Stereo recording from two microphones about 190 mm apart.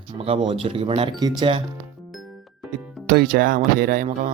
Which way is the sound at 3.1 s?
55° right (ahead or behind).